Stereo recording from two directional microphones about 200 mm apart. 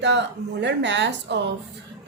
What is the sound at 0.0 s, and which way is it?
A woman's voice, 60° right (ahead or behind).